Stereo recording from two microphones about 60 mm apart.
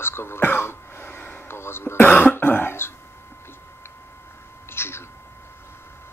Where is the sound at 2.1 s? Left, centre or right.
Left.